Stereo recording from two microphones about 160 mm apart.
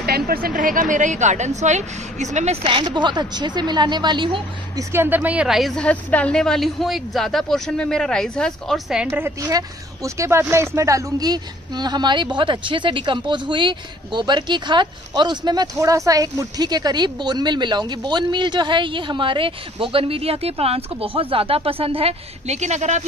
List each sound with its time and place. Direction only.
0.0 s speech: 70° right (ahead or behind); by 4.8 s 30° right (ahead or behind)
4.9 s a woman's voice: 15° right (ahead or behind)
9.2 s speech: 20° right (ahead or behind); by 23.0 s 45° right (ahead or behind)